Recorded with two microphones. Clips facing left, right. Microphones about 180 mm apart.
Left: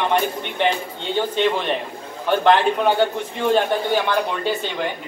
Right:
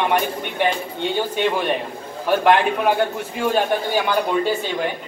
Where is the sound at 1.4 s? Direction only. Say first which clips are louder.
Even; 10° right (ahead or behind).